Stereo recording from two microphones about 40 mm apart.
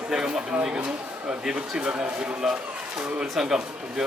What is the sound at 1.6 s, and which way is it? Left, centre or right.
Speech, right.